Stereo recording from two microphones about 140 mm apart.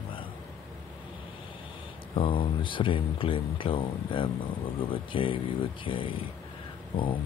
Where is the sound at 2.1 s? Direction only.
40° left (ahead or behind).